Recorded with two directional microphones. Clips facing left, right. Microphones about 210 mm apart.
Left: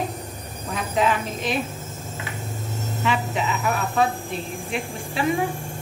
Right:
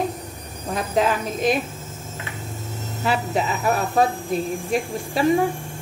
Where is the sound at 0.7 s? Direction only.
40° right (ahead or behind).